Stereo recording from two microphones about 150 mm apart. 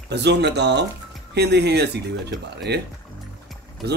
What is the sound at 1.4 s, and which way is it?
Speech, 90° right.